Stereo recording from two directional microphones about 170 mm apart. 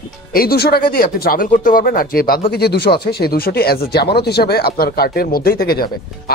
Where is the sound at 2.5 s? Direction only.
70° left (ahead or behind).